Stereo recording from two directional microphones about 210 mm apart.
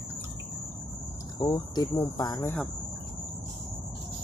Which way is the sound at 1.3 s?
20° left (ahead or behind).